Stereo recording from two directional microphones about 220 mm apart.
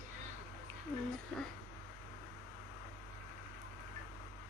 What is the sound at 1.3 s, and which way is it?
Speech, 5° left (ahead or behind).